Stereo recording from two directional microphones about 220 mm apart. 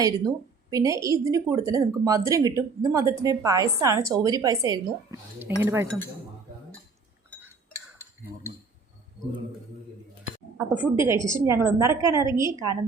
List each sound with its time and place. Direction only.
0.0 s a woman's voice: 15° right (ahead or behind)
10.8 s a woman's voice: 10° right (ahead or behind)